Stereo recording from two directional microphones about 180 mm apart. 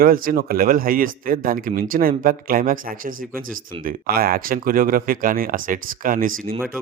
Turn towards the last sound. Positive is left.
turn(degrees=-50)  # may be behind; listen again after turning